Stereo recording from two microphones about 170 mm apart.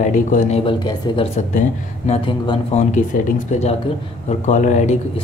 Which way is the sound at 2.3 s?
35° left (ahead or behind).